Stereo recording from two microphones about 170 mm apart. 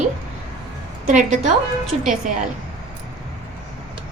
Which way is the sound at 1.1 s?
50° right (ahead or behind).